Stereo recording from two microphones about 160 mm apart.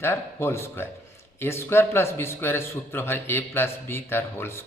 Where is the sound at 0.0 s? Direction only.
15° left (ahead or behind).